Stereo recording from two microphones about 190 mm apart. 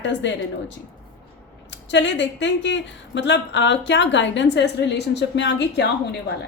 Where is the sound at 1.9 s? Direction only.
70° left (ahead or behind).